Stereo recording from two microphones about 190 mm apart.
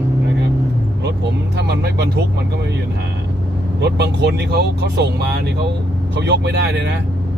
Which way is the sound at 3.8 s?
60° right (ahead or behind).